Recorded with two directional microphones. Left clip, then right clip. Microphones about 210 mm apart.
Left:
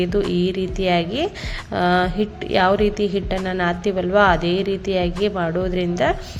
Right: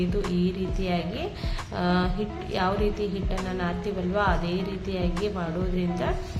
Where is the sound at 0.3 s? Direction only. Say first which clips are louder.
Left 8 dB; 40° left (ahead or behind).